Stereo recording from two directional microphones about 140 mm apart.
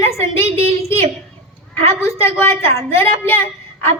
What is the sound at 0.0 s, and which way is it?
Speech, 20° left (ahead or behind).